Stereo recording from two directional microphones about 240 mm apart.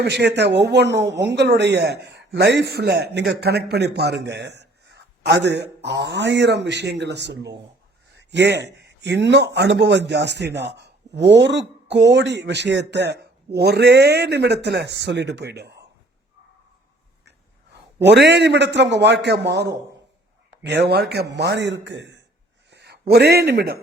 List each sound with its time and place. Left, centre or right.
0.0 s speech: right
17.2 s a man's voice: right